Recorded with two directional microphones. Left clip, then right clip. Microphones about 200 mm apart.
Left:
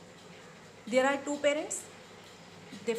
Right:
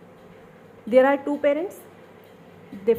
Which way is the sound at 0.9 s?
35° right (ahead or behind).